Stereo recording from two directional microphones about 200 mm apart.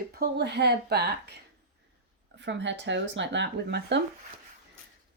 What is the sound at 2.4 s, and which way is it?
Speech, 60° right (ahead or behind).